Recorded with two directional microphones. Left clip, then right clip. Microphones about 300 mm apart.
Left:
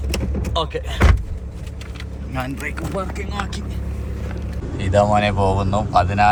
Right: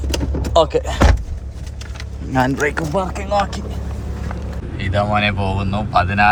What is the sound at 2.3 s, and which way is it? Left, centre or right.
Speech, right.